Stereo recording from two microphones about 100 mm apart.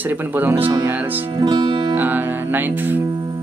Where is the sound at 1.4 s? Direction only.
40° right (ahead or behind).